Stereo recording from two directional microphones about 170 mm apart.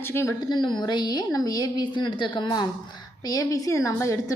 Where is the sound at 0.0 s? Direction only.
15° left (ahead or behind).